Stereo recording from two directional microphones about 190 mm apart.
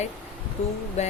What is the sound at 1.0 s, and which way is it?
Speech, 35° left (ahead or behind).